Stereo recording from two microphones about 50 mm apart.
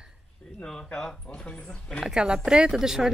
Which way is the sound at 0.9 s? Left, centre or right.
Centre.